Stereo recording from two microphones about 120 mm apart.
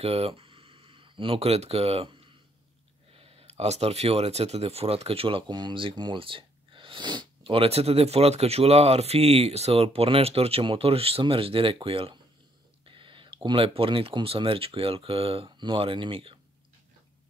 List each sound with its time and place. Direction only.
0.0 s a sound: 55° right (ahead or behind)
3.1 s speech: 50° right (ahead or behind)
5.5 s speech: 40° right (ahead or behind); by 15.5 s 55° right (ahead or behind)
15.5 s speech: 40° right (ahead or behind)